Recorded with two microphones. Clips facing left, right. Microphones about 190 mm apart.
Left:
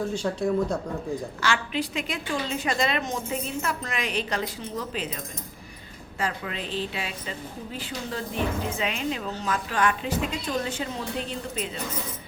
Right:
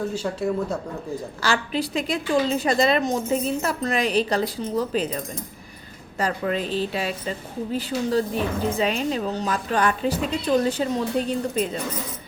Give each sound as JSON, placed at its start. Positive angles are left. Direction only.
{"t": 0.1, "sound": "speech", "side_deg": -5}
{"t": 1.4, "sound": "a woman's voice", "side_deg": -35}